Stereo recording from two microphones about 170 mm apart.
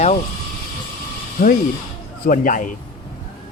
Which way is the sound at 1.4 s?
45° left (ahead or behind).